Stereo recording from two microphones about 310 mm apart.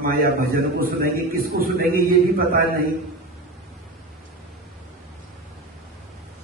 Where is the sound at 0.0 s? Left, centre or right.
Right.